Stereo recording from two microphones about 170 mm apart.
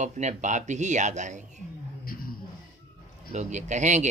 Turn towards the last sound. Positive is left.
turn(degrees=-45)  # may be behind; listen again after turning